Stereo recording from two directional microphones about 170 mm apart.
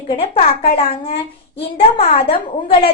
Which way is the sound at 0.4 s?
35° left (ahead or behind).